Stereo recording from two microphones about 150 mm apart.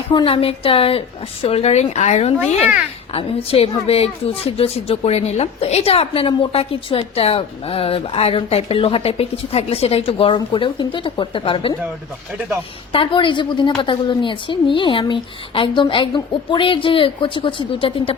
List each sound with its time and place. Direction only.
0.1 s a woman's voice: 35° left (ahead or behind); by 2.3 s 50° left (ahead or behind)
3.1 s a woman's voice: 40° left (ahead or behind)
12.9 s a woman's voice: 35° left (ahead or behind)